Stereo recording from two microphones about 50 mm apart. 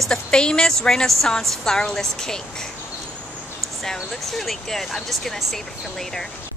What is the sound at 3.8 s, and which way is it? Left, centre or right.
A woman's voice, centre.